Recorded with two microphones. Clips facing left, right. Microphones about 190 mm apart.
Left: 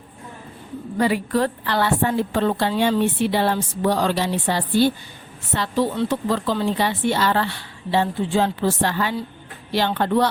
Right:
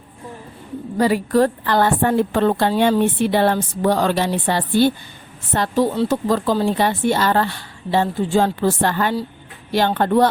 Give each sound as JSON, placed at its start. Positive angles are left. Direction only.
{"t": 0.9, "sound": "a woman's voice", "side_deg": -40}